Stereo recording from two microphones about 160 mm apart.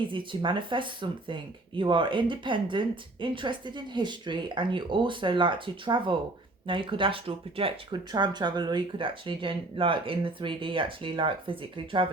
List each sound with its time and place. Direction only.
0.0 s speech: 30° right (ahead or behind)